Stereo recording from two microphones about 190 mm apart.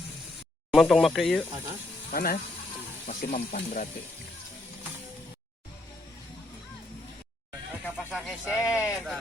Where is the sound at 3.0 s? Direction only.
40° left (ahead or behind).